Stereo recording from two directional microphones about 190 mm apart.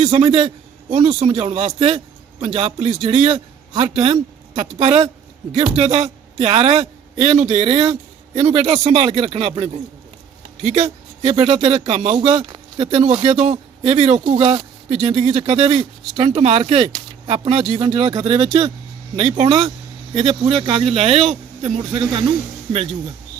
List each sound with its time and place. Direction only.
0.0 s a man's voice: 30° right (ahead or behind)
11.2 s speech: 30° right (ahead or behind)
12.1 s speech: 25° right (ahead or behind)
12.8 s speech: 35° right (ahead or behind)